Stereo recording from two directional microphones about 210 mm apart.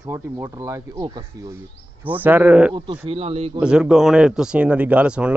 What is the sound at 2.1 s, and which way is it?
Speech, 10° right (ahead or behind).